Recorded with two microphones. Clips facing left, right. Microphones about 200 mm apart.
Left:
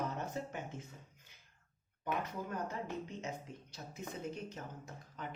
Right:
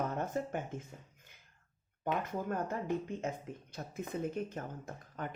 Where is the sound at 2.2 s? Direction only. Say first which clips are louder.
Right 5 dB; 50° right (ahead or behind).